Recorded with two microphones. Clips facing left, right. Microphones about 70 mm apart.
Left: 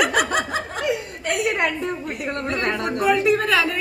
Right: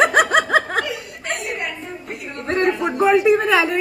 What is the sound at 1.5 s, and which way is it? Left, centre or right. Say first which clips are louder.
Speech: left 5 dB; left.